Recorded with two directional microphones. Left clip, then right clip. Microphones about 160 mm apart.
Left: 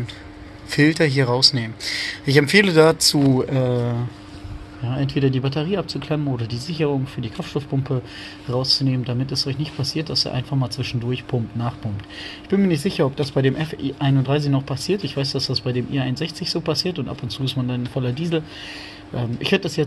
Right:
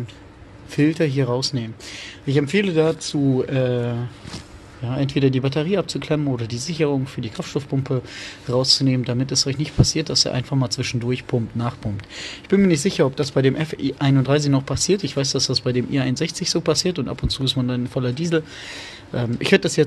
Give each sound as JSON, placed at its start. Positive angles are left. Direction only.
{"t": 0.7, "sound": "speech", "side_deg": -20}
{"t": 4.8, "sound": "speech", "side_deg": -15}
{"t": 8.5, "sound": "speech", "side_deg": -25}